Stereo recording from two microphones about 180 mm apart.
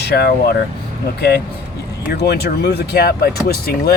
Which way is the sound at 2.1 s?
65° left (ahead or behind).